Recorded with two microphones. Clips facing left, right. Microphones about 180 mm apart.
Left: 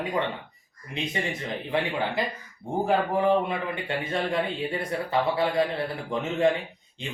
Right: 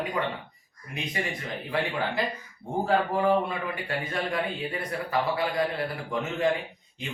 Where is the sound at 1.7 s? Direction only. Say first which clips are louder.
Left 1 dB; 20° left (ahead or behind).